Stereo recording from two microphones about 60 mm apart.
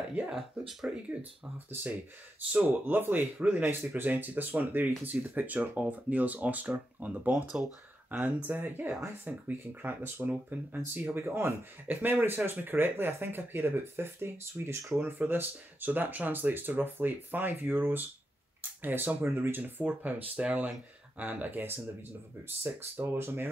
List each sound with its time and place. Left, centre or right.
0.3 s speech: centre
1.7 s speech: right
11.1 s speech: right
11.9 s speech: right
15.0 s speech: right
18.6 s a sound: right
19.2 s speech: right
19.5 s speech: right